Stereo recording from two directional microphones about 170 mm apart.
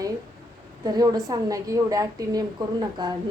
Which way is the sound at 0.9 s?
20° right (ahead or behind).